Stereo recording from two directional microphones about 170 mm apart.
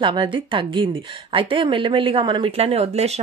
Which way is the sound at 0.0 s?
30° right (ahead or behind).